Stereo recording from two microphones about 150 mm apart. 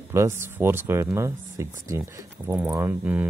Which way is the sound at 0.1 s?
15° right (ahead or behind).